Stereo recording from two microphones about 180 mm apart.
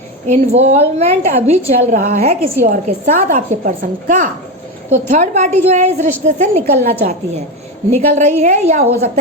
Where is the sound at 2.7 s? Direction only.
45° right (ahead or behind).